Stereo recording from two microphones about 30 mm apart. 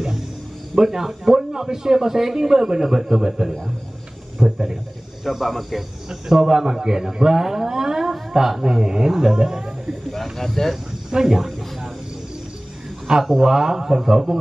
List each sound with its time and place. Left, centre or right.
0.7 s a man's voice: centre
6.0 s a man's voice: centre
10.3 s speech: centre
11.1 s speech: centre
13.4 s a man's voice: centre